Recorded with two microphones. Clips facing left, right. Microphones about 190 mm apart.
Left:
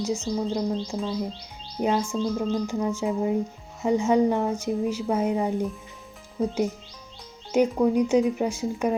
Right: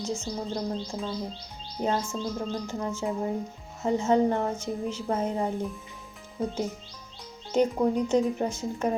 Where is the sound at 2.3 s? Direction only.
10° left (ahead or behind).